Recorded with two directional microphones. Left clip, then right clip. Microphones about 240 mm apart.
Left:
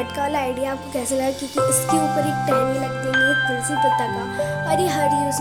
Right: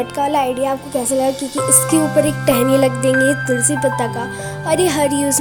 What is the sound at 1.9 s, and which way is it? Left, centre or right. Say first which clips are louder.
Speech: right 5 dB; centre.